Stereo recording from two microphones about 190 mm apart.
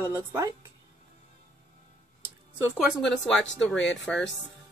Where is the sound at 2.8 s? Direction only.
Centre (ahead or behind).